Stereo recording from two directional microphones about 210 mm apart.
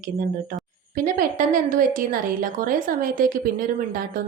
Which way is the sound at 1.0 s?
40° right (ahead or behind).